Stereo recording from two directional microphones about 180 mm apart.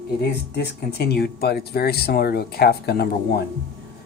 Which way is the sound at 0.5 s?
65° left (ahead or behind).